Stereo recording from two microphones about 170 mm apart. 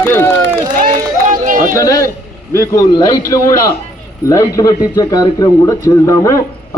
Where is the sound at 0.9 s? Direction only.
50° right (ahead or behind).